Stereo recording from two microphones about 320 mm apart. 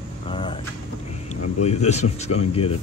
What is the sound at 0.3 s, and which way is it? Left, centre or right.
Vehicle, centre.